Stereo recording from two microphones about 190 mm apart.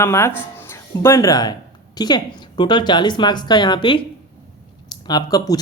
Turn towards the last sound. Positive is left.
turn(degrees=20)  # may be behind; listen again after turning